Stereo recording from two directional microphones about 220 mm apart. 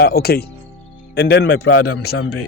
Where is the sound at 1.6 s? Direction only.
75° left (ahead or behind).